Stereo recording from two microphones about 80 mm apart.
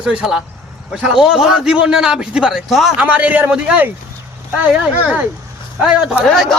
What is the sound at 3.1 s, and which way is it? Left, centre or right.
Speech, centre.